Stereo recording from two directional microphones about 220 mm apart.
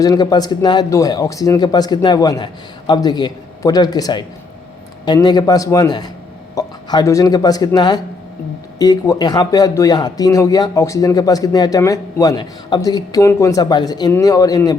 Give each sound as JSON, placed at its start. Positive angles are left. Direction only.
{"t": 0.0, "sound": "speech", "side_deg": 15}